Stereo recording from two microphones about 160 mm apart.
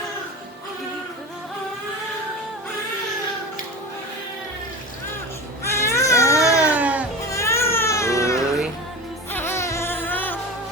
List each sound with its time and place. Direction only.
5.7 s baby cry: 20° left (ahead or behind)
6.6 s music: 10° right (ahead or behind)
7.3 s baby cry: 20° left (ahead or behind)
9.3 s music: 15° left (ahead or behind)